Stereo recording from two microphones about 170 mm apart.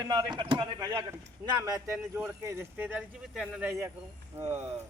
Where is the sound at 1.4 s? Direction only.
10° right (ahead or behind).